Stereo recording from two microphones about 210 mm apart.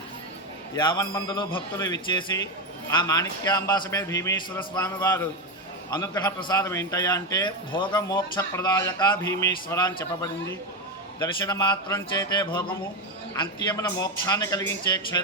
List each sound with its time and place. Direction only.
0.8 s a man's voice: 20° left (ahead or behind)